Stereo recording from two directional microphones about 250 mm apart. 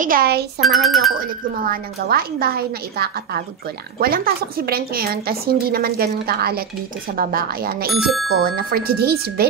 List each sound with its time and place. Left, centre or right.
0.0 s a woman's voice: right
0.6 s speech: centre
1.1 s a woman's voice: right
7.9 s speech: centre
8.4 s a woman's voice: right